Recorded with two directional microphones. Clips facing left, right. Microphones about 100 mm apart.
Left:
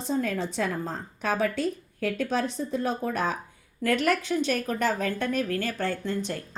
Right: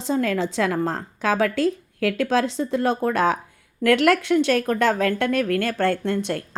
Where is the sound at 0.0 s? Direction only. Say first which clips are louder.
Right 5 dB; 90° right.